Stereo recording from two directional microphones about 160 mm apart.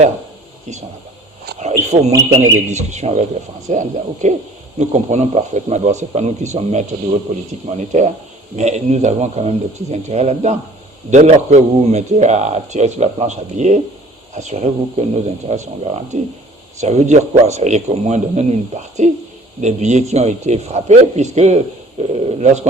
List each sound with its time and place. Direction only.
1.6 s a man's voice: 45° right (ahead or behind)
2.1 s a man's voice: 20° right (ahead or behind)
2.6 s a man's voice: 45° right (ahead or behind)